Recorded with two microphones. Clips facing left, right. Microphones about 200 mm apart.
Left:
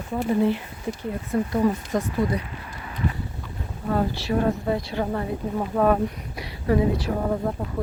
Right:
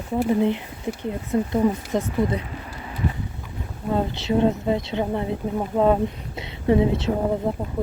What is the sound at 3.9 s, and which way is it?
Speech, 20° right (ahead or behind).